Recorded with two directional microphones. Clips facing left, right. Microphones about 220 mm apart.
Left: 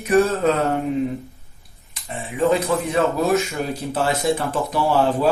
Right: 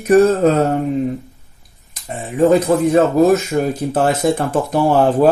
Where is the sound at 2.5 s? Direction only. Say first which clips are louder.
Right 7 dB; 45° right (ahead or behind).